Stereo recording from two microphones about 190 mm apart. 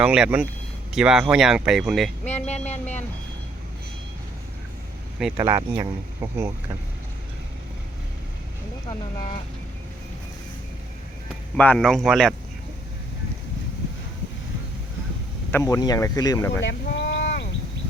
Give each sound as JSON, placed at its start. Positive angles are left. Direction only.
{"t": 0.0, "sound": "speech", "side_deg": -5}
{"t": 2.2, "sound": "speech", "side_deg": 35}
{"t": 5.4, "sound": "speech", "side_deg": -20}
{"t": 11.5, "sound": "speech", "side_deg": 5}
{"t": 15.5, "sound": "speech", "side_deg": 20}
{"t": 16.6, "sound": "a sound", "side_deg": 60}